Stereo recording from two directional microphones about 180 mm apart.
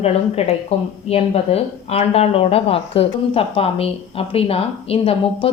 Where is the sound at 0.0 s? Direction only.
35° left (ahead or behind).